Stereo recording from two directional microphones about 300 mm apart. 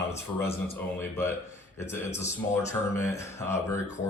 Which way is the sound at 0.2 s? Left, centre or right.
Centre.